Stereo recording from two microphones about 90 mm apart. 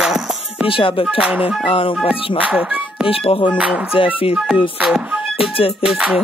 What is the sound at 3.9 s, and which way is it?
Music, 90° left.